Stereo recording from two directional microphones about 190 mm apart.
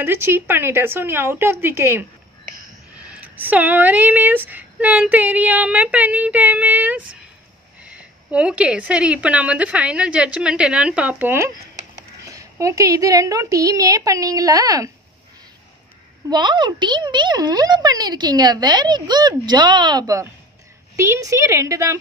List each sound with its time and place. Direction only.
0.0 s speech: 10° right (ahead or behind)
16.3 s speech: 25° right (ahead or behind)